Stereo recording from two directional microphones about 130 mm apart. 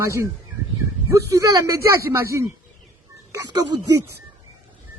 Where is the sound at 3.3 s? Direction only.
30° right (ahead or behind).